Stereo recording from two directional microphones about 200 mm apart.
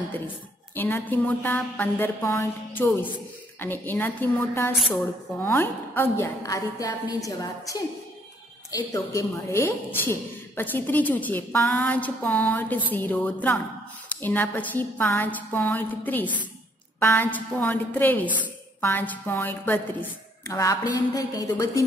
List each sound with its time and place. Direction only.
0.7 s a woman's voice: 10° left (ahead or behind)